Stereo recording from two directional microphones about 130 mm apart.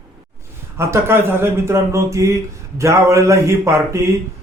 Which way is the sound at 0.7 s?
20° right (ahead or behind).